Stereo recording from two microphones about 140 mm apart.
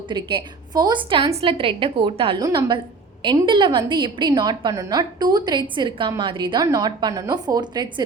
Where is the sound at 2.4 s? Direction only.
30° right (ahead or behind).